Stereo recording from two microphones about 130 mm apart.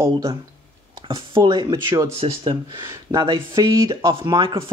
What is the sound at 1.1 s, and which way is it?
Speech, 35° right (ahead or behind).